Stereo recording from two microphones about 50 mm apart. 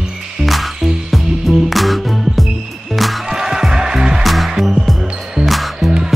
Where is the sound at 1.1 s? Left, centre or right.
Centre.